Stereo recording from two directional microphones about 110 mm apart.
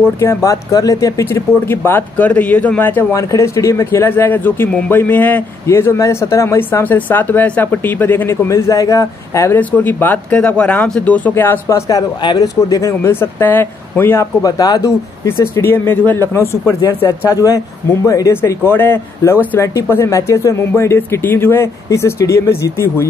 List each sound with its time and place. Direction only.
0.2 s a man's voice: 25° left (ahead or behind)
1.9 s a man's voice: 15° left (ahead or behind)
9.6 s speech: 15° left (ahead or behind)
12.2 s a man's voice: 40° left (ahead or behind); by 14.2 s 20° left (ahead or behind)
14.4 s speech: 30° left (ahead or behind)
15.2 s a man's voice: 20° left (ahead or behind)
18.0 s a man's voice: 30° left (ahead or behind)